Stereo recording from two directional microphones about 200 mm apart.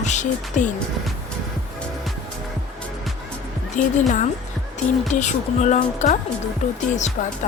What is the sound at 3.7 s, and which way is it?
A woman's voice, 40° left (ahead or behind).